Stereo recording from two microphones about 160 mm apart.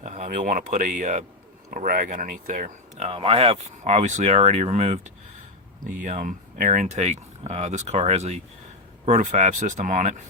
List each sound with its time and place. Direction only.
0.0 s speech: 45° right (ahead or behind)
3.1 s speech: 35° right (ahead or behind)